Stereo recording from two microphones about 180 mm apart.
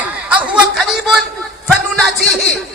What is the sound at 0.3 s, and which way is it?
Chatter, 5° right (ahead or behind).